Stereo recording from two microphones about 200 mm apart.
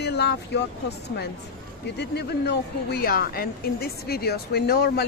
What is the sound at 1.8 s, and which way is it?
Speech, 55° left (ahead or behind).